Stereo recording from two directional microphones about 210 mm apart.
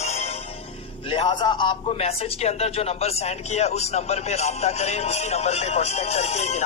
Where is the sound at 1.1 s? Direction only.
20° left (ahead or behind).